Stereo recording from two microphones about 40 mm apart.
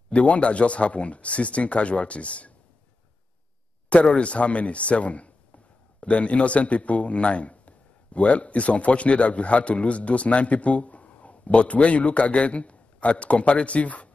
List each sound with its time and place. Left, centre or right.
0.1 s speech: left
3.9 s a man's voice: left